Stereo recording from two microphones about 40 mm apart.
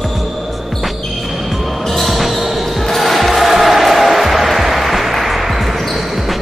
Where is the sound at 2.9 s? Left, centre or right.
Centre.